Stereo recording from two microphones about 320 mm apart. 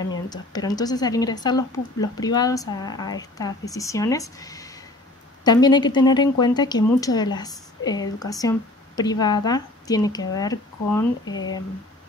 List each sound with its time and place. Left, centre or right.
0.3 s a woman's voice: centre
11.2 s speech: left